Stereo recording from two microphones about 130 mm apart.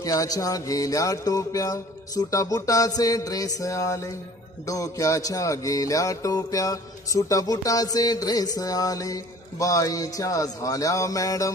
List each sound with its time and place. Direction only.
0.0 s music: 30° left (ahead or behind)